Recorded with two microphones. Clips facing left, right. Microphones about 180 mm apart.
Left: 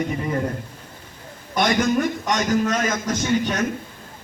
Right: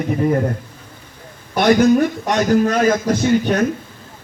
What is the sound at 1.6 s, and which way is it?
Speech, 60° right (ahead or behind).